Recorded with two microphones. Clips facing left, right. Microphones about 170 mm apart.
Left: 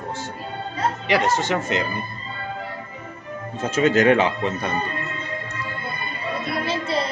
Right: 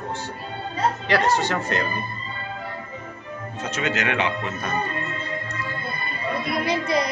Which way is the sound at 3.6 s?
45° left (ahead or behind).